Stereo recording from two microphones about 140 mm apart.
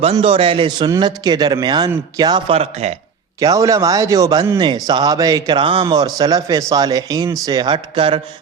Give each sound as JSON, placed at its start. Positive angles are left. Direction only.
{"t": 0.0, "sound": "speech", "side_deg": -45}
{"t": 2.5, "sound": "speech", "side_deg": -50}
{"t": 3.4, "sound": "speech", "side_deg": -25}